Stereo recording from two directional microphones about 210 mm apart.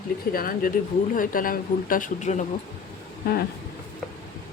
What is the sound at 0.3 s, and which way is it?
Speech, 45° left (ahead or behind).